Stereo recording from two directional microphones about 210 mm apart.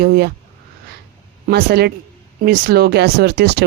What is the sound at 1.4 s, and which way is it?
A woman's voice, 50° right (ahead or behind).